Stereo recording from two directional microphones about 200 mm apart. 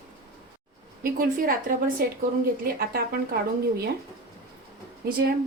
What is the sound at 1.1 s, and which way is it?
Speech, 45° right (ahead or behind).